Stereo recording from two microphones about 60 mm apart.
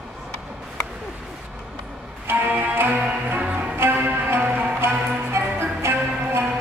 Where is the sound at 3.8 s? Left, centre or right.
Right.